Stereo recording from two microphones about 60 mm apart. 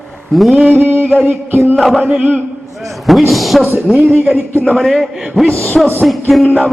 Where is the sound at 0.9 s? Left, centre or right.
Right.